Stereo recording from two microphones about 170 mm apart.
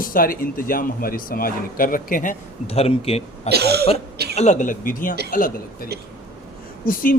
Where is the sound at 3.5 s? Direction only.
70° right (ahead or behind).